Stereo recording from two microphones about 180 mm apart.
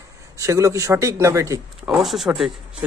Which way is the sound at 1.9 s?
Centre (ahead or behind).